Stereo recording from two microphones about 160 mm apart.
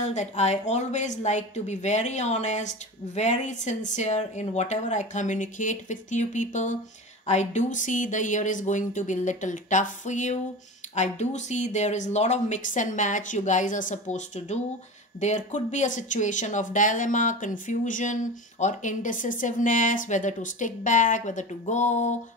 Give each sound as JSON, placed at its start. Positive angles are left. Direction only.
{"t": 0.0, "sound": "speech", "side_deg": 45}